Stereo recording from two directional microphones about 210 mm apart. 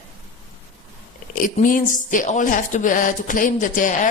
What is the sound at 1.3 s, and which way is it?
A woman's voice, 40° left (ahead or behind).